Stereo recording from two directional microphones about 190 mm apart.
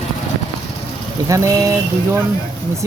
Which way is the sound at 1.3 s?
15° right (ahead or behind).